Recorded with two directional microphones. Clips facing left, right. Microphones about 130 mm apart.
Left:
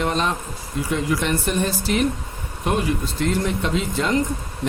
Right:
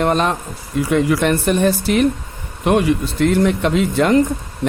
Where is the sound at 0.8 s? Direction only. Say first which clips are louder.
Right 7 dB; 65° right (ahead or behind).